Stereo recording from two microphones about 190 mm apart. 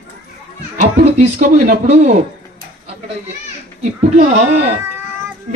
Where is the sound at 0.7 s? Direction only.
40° right (ahead or behind).